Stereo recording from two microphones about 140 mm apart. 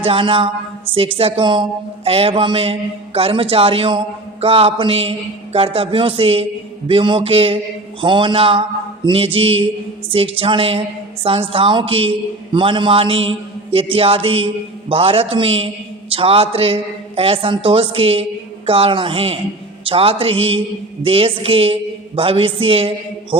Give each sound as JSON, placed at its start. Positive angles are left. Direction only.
{"t": 0.0, "sound": "a woman's voice", "side_deg": -40}